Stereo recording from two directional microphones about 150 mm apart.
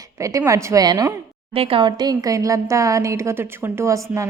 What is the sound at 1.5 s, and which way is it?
A woman's voice, 35° right (ahead or behind).